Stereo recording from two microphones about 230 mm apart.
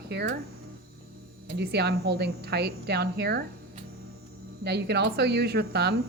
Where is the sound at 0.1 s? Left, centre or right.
Right.